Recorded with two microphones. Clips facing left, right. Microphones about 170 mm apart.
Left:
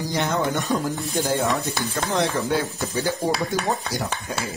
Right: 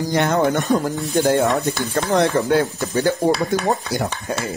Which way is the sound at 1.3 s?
65° right (ahead or behind).